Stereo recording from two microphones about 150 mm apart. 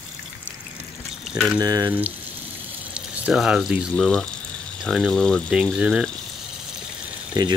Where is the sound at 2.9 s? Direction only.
5° right (ahead or behind).